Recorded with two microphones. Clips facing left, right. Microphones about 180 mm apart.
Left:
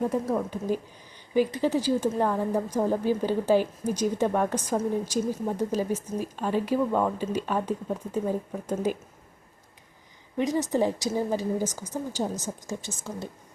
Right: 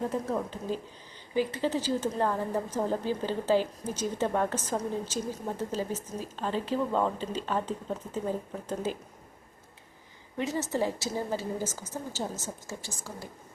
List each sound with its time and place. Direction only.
0.0 s a woman's voice: 15° left (ahead or behind)
10.3 s a woman's voice: 15° left (ahead or behind)